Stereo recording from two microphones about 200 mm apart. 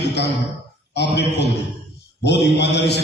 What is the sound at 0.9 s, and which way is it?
A man's voice, 55° left (ahead or behind).